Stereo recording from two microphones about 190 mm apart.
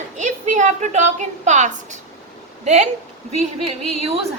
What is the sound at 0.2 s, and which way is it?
A woman's voice, 40° right (ahead or behind).